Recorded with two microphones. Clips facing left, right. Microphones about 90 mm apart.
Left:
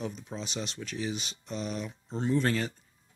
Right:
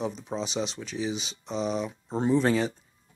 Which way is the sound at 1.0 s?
20° right (ahead or behind).